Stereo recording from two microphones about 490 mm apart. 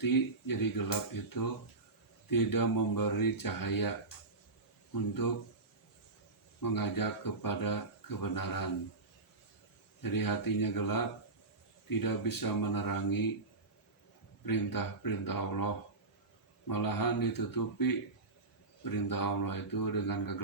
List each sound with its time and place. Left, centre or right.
0.0 s speech: left
2.3 s speech: left
5.2 s speech: left
6.6 s speech: left
10.0 s speech: left
14.4 s speech: left